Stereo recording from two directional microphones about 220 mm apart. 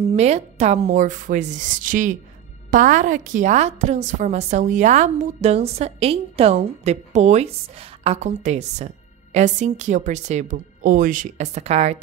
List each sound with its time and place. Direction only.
0.1 s a woman's voice: 30° right (ahead or behind)